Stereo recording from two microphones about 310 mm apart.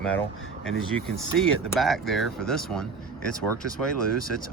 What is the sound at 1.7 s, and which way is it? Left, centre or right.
Speech, centre.